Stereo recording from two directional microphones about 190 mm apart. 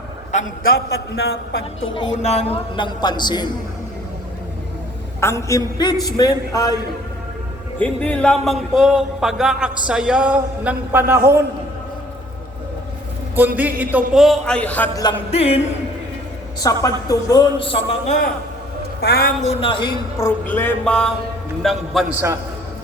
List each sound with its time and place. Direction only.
0.3 s a man's voice: 45° left (ahead or behind)
1.8 s a man's voice: 25° left (ahead or behind)
5.2 s a man's voice: 15° left (ahead or behind)
7.8 s music: 5° left (ahead or behind)
13.6 s music: 10° right (ahead or behind); by 14.8 s 10° left (ahead or behind)
15.3 s a sound: 30° left (ahead or behind)
16.6 s a man's voice: 20° left (ahead or behind)
19.0 s a man's voice: 55° left (ahead or behind)
19.4 s a man's voice: 30° left (ahead or behind); by 21.1 s 5° left (ahead or behind)
21.6 s music: centre (ahead or behind)